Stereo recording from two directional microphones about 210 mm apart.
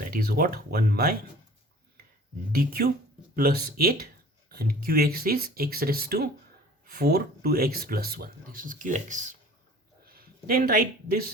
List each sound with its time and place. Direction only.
0.0 s speech: 45° right (ahead or behind)
2.5 s speech: 45° right (ahead or behind)